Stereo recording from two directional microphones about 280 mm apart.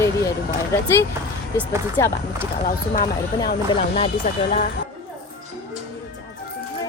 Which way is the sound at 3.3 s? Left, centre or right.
Centre.